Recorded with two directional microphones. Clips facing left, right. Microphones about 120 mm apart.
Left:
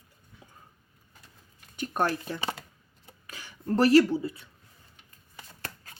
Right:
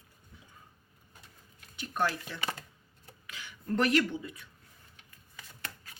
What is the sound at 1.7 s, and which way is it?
Speech, 45° left (ahead or behind).